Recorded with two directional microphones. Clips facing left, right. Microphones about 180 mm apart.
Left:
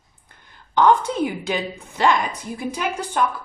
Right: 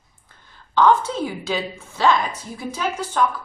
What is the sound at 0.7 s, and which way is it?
Speech, 15° left (ahead or behind).